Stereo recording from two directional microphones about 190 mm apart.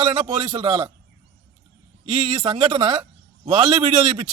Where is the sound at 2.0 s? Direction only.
30° right (ahead or behind).